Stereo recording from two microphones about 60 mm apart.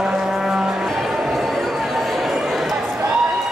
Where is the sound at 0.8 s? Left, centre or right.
Centre.